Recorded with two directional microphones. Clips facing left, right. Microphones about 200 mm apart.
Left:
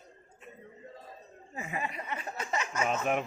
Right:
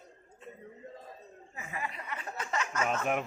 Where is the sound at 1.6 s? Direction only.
20° left (ahead or behind); by 3.2 s centre (ahead or behind).